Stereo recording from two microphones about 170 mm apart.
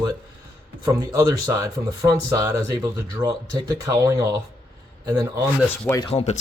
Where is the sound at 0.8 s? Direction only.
20° right (ahead or behind).